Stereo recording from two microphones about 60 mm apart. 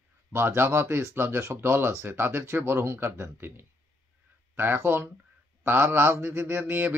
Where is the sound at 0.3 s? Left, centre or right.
Right.